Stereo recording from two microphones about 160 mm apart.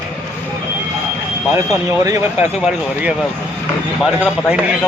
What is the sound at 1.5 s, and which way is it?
Speech, 20° right (ahead or behind).